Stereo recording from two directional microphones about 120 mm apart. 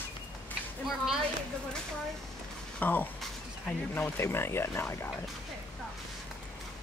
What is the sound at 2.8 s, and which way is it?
Speech, 15° left (ahead or behind).